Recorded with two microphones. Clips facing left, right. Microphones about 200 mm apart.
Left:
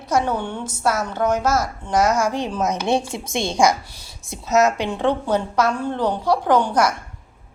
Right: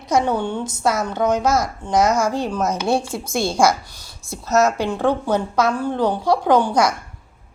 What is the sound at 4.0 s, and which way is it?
Speech, 20° left (ahead or behind).